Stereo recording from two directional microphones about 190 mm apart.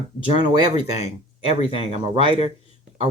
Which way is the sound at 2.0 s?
30° right (ahead or behind).